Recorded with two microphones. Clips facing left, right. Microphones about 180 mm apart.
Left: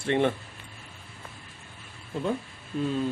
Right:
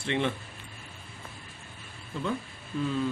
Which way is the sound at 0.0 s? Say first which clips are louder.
Left 5 dB; 50° left (ahead or behind).